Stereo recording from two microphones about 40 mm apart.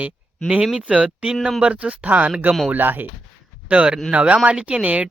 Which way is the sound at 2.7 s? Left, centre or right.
Right.